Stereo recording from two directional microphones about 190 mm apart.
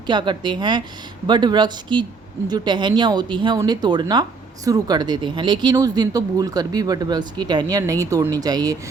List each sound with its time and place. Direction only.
0.1 s speech: 25° right (ahead or behind)